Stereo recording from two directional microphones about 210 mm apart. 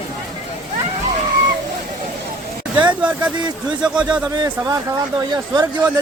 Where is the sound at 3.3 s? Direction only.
20° right (ahead or behind).